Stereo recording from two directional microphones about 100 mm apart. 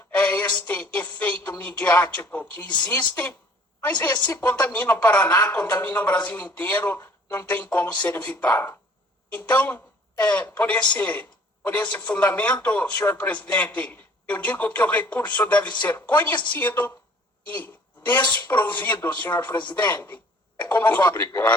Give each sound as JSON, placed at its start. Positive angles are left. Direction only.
{"t": 0.2, "sound": "a woman's voice", "side_deg": 15}
{"t": 18.5, "sound": "a woman's voice", "side_deg": 20}